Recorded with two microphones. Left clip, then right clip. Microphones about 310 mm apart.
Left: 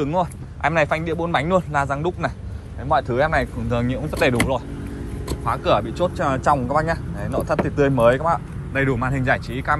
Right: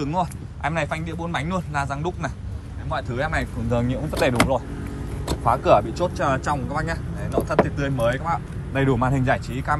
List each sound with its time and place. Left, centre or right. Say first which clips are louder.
0.0 s speech: left 3 dB; centre
8.7 s speech: even; centre